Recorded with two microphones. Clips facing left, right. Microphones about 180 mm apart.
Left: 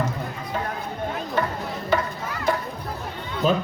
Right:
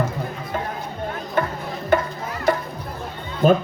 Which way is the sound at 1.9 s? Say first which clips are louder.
Right 4 dB; 50° right (ahead or behind).